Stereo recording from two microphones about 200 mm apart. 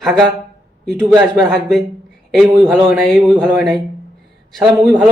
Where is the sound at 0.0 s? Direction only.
Centre (ahead or behind).